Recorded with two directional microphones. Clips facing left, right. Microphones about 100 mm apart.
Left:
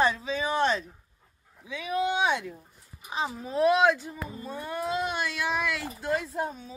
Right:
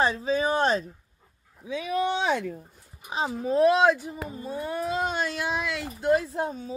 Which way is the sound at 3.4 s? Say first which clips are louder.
Right 2 dB; 35° right (ahead or behind).